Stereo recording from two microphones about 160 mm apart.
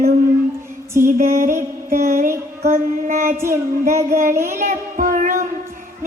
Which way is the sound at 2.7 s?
50° right (ahead or behind).